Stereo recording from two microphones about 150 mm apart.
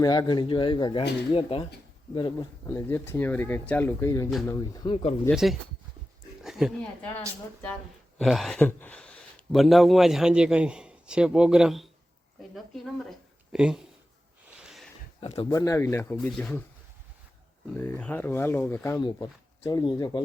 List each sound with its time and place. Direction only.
0.0 s speech: 25° left (ahead or behind)
2.6 s speech: 20° left (ahead or behind)
5.3 s speech: centre (ahead or behind)
6.4 s a sound: 5° right (ahead or behind)
8.2 s speech: centre (ahead or behind)
14.6 s a sound: centre (ahead or behind)
15.2 s speech: 45° left (ahead or behind)
15.4 s speech: 25° left (ahead or behind); by 16.6 s 5° left (ahead or behind)
17.7 s speech: 15° left (ahead or behind)
18.9 s speech: 30° left (ahead or behind)